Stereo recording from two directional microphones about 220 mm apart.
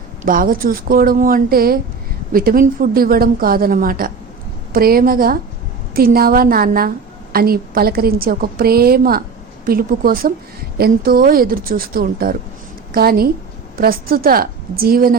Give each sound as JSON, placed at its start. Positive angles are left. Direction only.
{"t": 0.2, "sound": "a woman's voice", "side_deg": -40}